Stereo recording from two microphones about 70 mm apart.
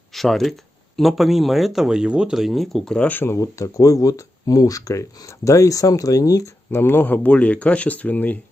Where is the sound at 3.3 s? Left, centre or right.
Left.